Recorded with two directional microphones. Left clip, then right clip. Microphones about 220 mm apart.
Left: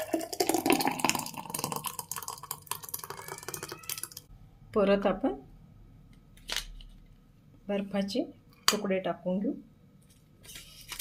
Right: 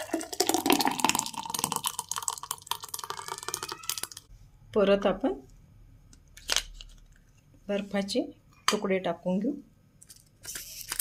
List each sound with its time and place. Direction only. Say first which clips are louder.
0.3 s water: right 2 dB; 15° right (ahead or behind)
4.7 s speech: right 2 dB; 10° right (ahead or behind)
6.4 s scissors: right 6 dB; 20° right (ahead or behind)
7.7 s speech: right 2 dB; 15° right (ahead or behind)
10.4 s a sound: right 6 dB; 25° right (ahead or behind)